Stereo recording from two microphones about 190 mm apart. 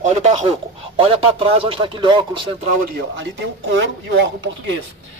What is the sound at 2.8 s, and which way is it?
Speech, 60° right (ahead or behind).